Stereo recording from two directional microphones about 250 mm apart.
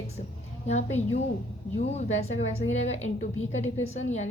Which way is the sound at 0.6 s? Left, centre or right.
Left.